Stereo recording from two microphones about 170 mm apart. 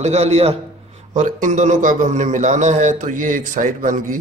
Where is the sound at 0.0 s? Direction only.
40° right (ahead or behind).